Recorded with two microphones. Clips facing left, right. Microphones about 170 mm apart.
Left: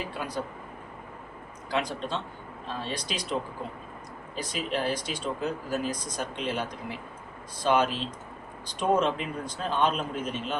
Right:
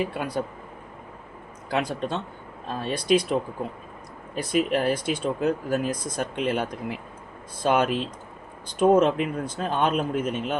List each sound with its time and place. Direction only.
0.2 s speech: 55° right (ahead or behind)
1.7 s speech: 55° right (ahead or behind)
4.4 s speech: 55° right (ahead or behind)